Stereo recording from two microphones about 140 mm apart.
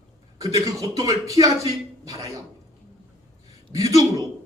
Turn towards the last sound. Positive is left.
turn(degrees=-25)  # may be behind; listen again after turning